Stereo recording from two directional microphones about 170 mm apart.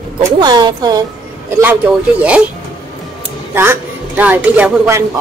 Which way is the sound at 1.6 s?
10° right (ahead or behind).